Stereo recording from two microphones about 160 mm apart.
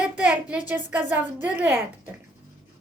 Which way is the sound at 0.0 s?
5° right (ahead or behind).